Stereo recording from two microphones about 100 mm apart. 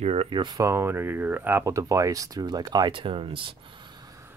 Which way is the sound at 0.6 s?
25° right (ahead or behind).